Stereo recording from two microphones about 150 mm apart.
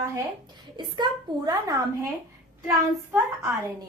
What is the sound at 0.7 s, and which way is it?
A woman's voice, 30° right (ahead or behind).